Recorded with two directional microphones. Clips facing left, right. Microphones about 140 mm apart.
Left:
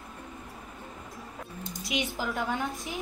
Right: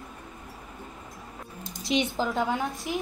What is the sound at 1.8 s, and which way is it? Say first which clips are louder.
Speech: right 6 dB; 20° right (ahead or behind).